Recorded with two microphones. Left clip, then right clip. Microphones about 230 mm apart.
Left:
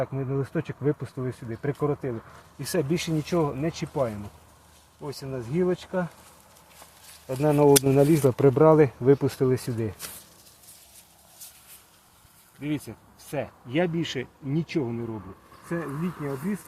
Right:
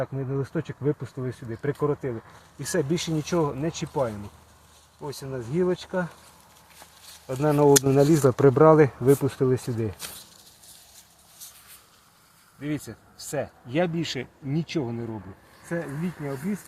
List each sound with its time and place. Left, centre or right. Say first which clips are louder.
0.0 s speech: left 1 dB; centre
7.3 s speech: even; centre
13.1 s speech: right 2 dB; right